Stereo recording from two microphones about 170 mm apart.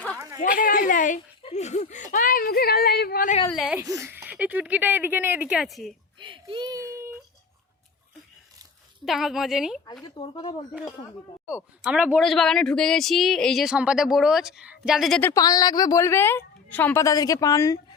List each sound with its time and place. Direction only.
0.3 s speech: 55° left (ahead or behind)
3.5 s speech: centre (ahead or behind)
3.8 s speech: 20° right (ahead or behind); by 5.9 s centre (ahead or behind)
6.1 s a child's voice: 30° right (ahead or behind)
9.0 s speech: centre (ahead or behind)
10.0 s speech: 30° left (ahead or behind)
11.4 s speech: 5° right (ahead or behind)
15.2 s a woman's voice: 20° left (ahead or behind)